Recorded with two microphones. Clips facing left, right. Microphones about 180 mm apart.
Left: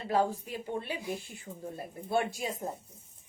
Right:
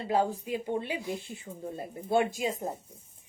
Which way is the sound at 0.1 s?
15° right (ahead or behind).